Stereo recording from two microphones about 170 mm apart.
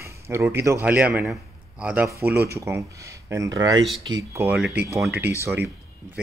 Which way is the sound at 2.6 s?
20° right (ahead or behind).